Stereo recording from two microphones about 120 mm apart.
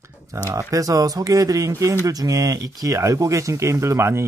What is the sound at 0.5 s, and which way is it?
Speech, 25° right (ahead or behind).